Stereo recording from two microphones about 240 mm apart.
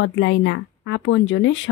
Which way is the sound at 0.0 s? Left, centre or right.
Left.